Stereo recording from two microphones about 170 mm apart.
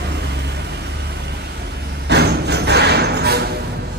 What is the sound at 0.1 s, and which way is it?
Vehicle, 80° right.